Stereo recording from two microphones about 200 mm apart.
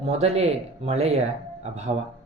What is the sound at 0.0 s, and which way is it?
Speech, 30° right (ahead or behind).